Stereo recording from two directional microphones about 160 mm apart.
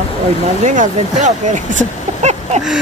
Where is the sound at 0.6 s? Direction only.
50° right (ahead or behind).